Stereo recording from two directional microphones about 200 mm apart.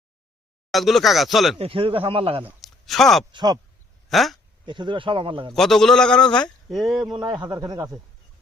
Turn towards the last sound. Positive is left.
turn(degrees=-20)  # may be behind; listen again after turning